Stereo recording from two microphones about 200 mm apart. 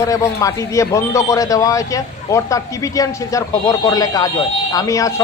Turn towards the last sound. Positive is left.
turn(degrees=15)  # may be behind; listen again after turning